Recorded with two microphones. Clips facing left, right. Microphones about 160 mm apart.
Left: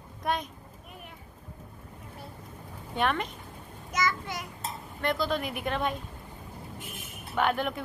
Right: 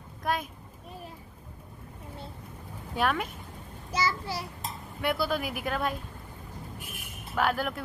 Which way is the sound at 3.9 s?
30° right (ahead or behind).